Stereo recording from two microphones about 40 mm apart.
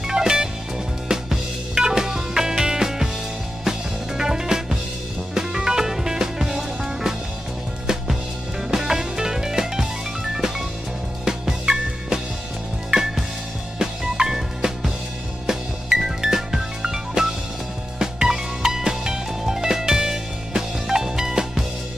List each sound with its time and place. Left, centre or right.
0.0 s music: centre
4.2 s music: centre
8.6 s music: centre
11.2 s music: centre